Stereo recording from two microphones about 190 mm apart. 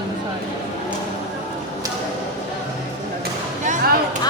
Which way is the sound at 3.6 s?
45° right (ahead or behind).